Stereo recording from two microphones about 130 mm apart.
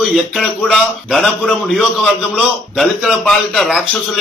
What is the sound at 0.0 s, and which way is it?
A man's voice, centre (ahead or behind).